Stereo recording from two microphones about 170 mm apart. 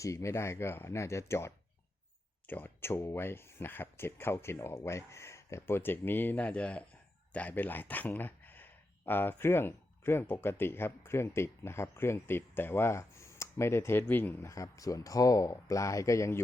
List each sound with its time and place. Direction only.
0.0 s speech: 20° left (ahead or behind)